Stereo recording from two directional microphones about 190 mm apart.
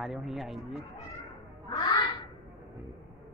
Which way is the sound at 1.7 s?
20° left (ahead or behind).